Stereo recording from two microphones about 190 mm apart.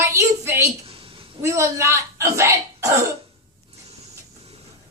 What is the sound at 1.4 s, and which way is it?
Speech, 15° right (ahead or behind).